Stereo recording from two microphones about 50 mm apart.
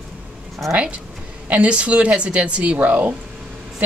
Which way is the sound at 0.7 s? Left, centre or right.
Right.